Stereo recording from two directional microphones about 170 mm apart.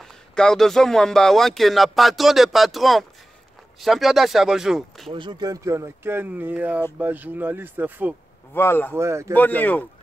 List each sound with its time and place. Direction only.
0.0 s speech: 5° left (ahead or behind)
5.1 s speech: 25° right (ahead or behind); by 8.2 s 10° right (ahead or behind)
8.5 s speech: 15° left (ahead or behind)
8.9 s speech: 15° right (ahead or behind)
9.3 s speech: 10° left (ahead or behind)